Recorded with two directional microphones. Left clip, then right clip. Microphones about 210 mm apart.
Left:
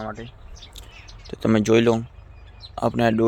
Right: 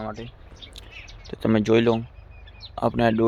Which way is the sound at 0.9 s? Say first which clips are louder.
Right 3 dB; 45° right (ahead or behind).